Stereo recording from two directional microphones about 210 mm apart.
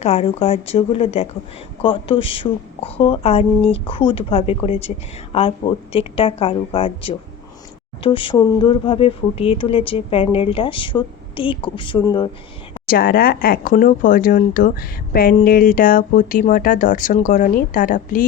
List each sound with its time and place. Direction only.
0.0 s speech: 30° left (ahead or behind)
12.9 s speech: 45° left (ahead or behind)